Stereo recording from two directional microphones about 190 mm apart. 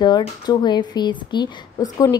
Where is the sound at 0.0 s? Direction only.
20° left (ahead or behind).